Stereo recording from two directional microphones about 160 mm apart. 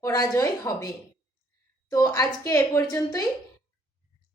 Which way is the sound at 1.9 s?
20° left (ahead or behind).